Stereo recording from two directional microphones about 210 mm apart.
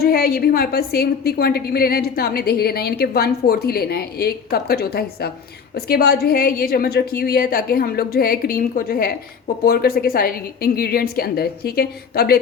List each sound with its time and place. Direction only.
0.0 s a woman's voice: 45° left (ahead or behind)